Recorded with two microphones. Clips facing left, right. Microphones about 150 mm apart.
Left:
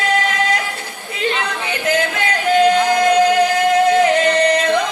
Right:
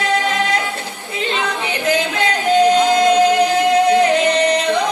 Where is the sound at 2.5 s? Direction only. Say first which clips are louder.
Right 1 dB; 20° right (ahead or behind).